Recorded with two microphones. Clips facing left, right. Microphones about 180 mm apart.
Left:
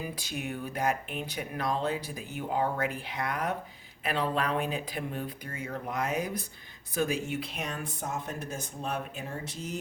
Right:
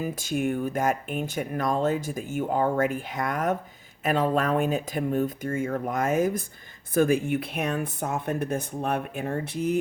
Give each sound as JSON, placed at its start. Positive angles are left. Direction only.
{"t": 0.0, "sound": "speech", "side_deg": -50}